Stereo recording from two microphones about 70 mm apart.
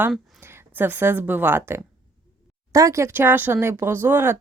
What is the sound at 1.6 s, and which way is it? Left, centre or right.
Speech, right.